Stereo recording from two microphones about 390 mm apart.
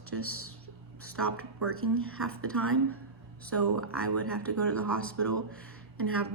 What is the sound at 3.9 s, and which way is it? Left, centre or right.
Speech, centre.